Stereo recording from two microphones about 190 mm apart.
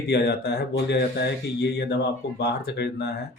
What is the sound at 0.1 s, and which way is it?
Speech, 60° left (ahead or behind).